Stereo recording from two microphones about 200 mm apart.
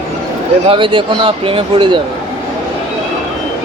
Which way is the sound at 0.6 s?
25° right (ahead or behind).